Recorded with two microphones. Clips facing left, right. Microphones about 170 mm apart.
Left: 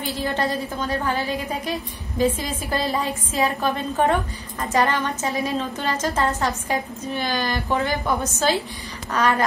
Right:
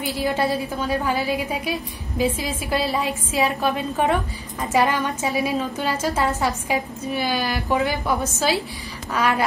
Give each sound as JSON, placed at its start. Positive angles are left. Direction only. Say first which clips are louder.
{"t": 0.2, "sound": "a woman's voice", "louder": "right 3 dB", "side_deg": -10}